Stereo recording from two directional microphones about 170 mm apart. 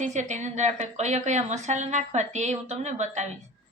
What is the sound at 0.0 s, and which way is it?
A woman's voice, 45° right (ahead or behind).